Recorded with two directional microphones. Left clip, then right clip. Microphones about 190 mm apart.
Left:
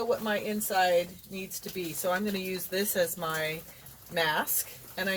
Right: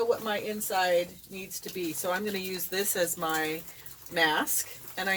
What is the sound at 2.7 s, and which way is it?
Speech, 40° right (ahead or behind).